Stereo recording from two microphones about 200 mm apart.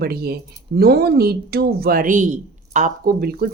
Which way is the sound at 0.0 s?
50° right (ahead or behind).